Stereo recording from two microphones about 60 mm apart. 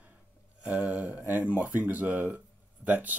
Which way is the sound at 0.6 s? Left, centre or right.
Right.